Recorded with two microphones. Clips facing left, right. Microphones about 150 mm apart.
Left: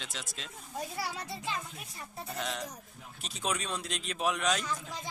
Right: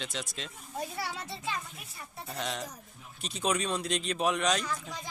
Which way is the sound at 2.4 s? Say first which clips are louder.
Right 2 dB; centre (ahead or behind).